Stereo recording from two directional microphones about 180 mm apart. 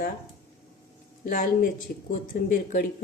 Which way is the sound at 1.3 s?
50° left (ahead or behind).